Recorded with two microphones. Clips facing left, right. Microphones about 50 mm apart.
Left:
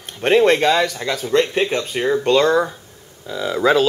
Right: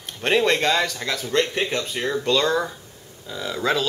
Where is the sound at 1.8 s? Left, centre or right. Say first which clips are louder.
Left 6 dB; left.